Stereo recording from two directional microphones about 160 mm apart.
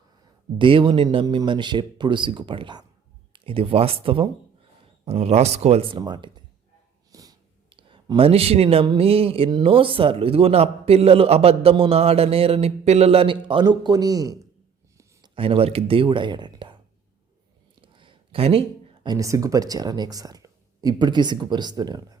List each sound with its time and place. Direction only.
0.6 s speech: 30° right (ahead or behind)
6.0 s speech: 30° right (ahead or behind)
15.4 s speech: 35° right (ahead or behind)
17.7 s a sound: 30° right (ahead or behind)
19.0 s speech: 20° right (ahead or behind)